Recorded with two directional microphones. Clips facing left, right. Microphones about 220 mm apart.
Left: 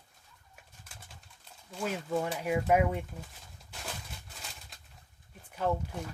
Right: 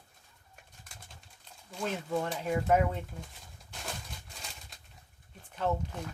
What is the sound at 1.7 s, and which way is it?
Speech, 5° left (ahead or behind).